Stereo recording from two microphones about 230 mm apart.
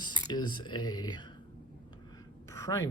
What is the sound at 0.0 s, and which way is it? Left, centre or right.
Speech, centre.